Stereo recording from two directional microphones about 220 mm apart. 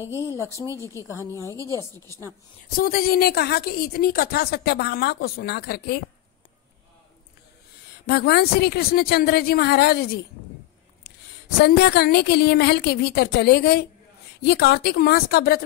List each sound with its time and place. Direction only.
2.7 s a woman's voice: 40° left (ahead or behind)
8.1 s a woman's voice: 45° left (ahead or behind)